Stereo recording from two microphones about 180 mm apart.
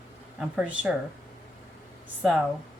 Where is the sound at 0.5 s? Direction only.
5° right (ahead or behind).